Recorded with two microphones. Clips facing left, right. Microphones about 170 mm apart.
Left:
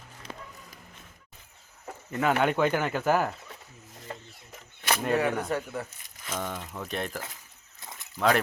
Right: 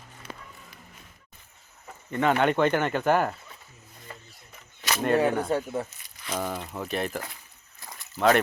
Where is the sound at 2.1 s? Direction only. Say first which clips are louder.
Right 2 dB; 5° left (ahead or behind).